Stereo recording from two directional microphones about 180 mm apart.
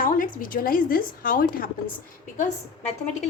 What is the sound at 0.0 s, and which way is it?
A woman's voice, 50° left (ahead or behind).